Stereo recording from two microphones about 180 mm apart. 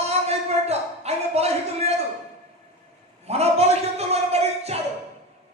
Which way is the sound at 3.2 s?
35° right (ahead or behind).